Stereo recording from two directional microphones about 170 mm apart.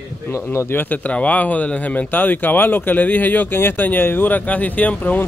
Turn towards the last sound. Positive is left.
turn(degrees=10)  # may be behind; listen again after turning